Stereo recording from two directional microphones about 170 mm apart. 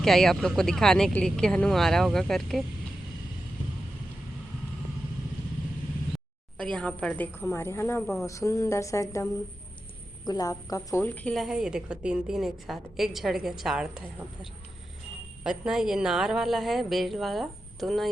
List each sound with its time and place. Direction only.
0.0 s a woman's voice: centre (ahead or behind)
6.1 s a woman's voice: 5° left (ahead or behind)